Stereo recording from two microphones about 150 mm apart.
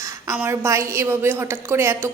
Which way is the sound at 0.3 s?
15° right (ahead or behind).